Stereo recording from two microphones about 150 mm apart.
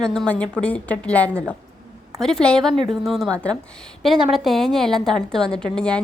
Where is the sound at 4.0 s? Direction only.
Centre (ahead or behind).